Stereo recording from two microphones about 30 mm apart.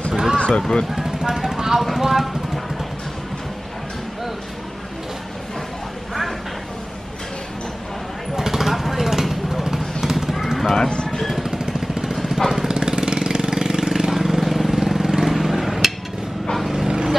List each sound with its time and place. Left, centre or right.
0.1 s a sound: centre
0.6 s speech: left
0.9 s vehicle: centre
2.0 s a sound: centre
8.4 s vehicle: centre
11.1 s a sound: centre
11.5 s vehicle: right
12.3 s jackhammer: centre
12.6 s vehicle: right; by 14.8 s centre
14.9 s vehicle: centre
15.2 s a sound: centre
16.7 s vehicle: centre